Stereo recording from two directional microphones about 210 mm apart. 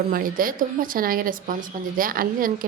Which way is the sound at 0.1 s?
40° right (ahead or behind).